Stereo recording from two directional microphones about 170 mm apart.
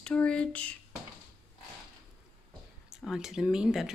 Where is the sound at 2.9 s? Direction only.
Centre (ahead or behind).